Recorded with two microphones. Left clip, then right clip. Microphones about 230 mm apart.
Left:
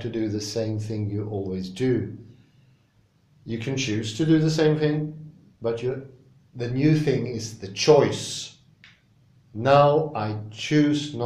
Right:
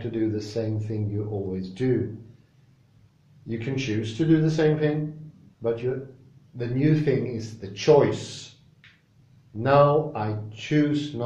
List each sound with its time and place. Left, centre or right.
0.0 s speech: centre
3.4 s a man's voice: centre
9.6 s a man's voice: centre